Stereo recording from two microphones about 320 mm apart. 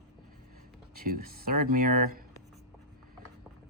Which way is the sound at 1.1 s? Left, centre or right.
Right.